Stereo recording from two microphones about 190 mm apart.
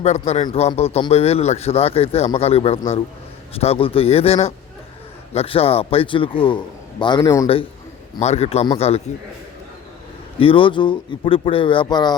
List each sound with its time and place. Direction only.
0.0 s speech: 35° left (ahead or behind); by 7.4 s 20° left (ahead or behind)
8.2 s speech: 35° left (ahead or behind)
10.4 s speech: 30° left (ahead or behind)